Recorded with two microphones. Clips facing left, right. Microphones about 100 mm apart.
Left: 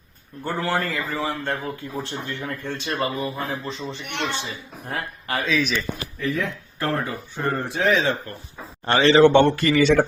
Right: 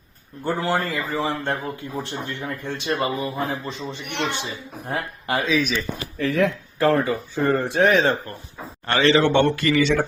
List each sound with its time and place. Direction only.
0.4 s a man's voice: 15° right (ahead or behind)
5.5 s a man's voice: 10° right (ahead or behind)
6.1 s speech: 90° right; by 8.1 s 60° right (ahead or behind)
8.9 s a man's voice: 30° left (ahead or behind)